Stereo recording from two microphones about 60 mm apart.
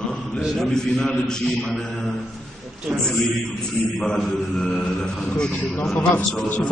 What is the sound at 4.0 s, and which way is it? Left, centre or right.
A man's voice, centre.